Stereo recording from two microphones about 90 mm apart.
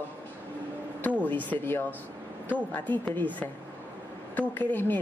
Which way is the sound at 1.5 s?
25° left (ahead or behind).